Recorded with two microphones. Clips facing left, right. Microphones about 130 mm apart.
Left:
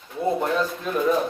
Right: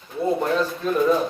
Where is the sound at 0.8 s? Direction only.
40° right (ahead or behind).